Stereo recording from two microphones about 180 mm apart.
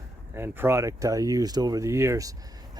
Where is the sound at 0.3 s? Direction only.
10° right (ahead or behind).